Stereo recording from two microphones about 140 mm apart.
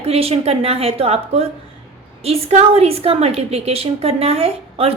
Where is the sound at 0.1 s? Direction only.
45° right (ahead or behind).